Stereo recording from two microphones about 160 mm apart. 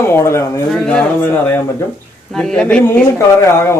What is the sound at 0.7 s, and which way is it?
A man's voice, 5° left (ahead or behind).